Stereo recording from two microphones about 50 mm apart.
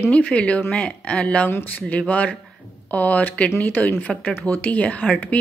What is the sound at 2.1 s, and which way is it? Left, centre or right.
Speech, left.